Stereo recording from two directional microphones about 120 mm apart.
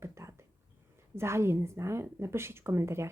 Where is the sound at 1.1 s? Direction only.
20° right (ahead or behind).